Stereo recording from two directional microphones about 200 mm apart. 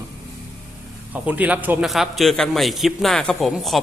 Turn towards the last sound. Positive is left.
turn(degrees=0)  # may be behind; listen again after turning